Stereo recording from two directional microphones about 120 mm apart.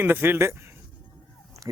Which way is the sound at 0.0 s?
15° right (ahead or behind).